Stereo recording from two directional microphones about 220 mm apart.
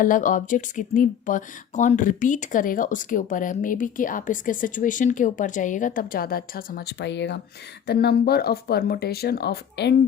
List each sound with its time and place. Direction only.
0.0 s speech: 35° left (ahead or behind)